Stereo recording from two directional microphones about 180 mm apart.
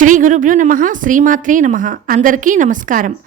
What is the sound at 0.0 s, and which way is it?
A woman's voice, 45° right (ahead or behind).